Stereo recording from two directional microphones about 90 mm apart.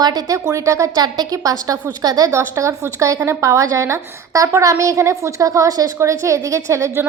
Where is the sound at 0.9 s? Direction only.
50° right (ahead or behind).